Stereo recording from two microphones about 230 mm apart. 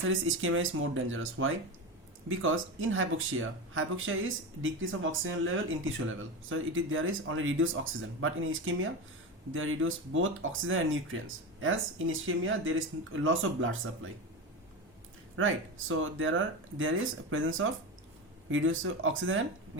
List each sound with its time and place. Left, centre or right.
0.1 s speech: right
15.4 s speech: right